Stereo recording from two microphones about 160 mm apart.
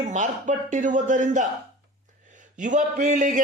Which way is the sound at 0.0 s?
50° right (ahead or behind).